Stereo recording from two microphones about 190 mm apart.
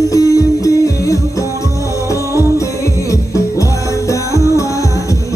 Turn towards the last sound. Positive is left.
turn(degrees=15)  # may be behind; listen again after turning